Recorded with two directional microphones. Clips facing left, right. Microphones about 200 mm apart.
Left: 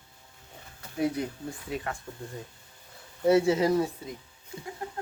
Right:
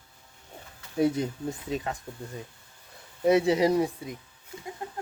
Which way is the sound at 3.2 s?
15° right (ahead or behind).